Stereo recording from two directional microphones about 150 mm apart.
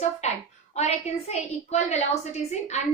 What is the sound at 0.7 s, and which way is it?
A woman's voice, 45° left (ahead or behind).